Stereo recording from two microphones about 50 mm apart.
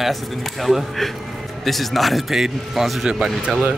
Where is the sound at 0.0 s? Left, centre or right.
Centre.